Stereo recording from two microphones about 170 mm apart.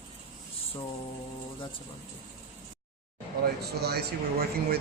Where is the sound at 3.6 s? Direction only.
70° right (ahead or behind).